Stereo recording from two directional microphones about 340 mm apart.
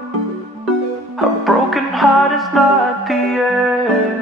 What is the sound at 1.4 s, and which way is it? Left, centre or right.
Music, centre.